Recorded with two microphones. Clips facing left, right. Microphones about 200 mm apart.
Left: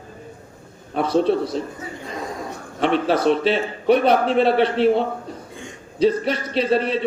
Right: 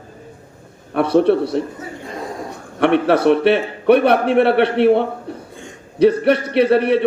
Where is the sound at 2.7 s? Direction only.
65° right (ahead or behind).